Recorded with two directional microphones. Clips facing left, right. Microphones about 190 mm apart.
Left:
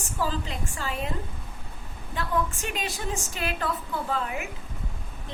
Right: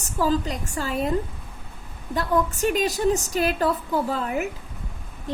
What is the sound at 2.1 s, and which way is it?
A woman's voice, 40° right (ahead or behind).